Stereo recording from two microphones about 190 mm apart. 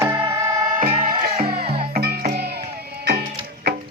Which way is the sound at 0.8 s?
45° right (ahead or behind).